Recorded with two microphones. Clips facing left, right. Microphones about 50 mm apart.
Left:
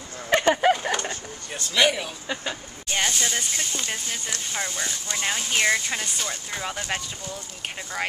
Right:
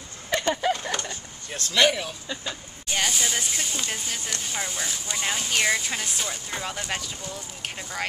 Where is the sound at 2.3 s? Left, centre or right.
Left.